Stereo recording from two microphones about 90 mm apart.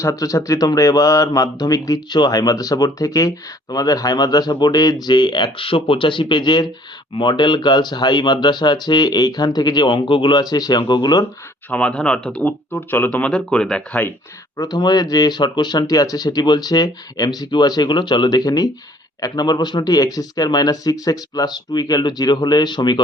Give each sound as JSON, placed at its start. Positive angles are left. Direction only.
{"t": 0.0, "sound": "speech", "side_deg": 35}
{"t": 11.7, "sound": "speech", "side_deg": 10}
{"t": 14.5, "sound": "speech", "side_deg": 45}